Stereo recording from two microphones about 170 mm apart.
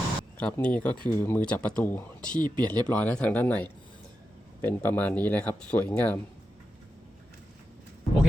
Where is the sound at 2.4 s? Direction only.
25° right (ahead or behind).